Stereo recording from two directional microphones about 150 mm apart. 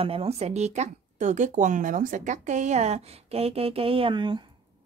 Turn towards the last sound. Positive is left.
turn(degrees=-30)  # may be behind; listen again after turning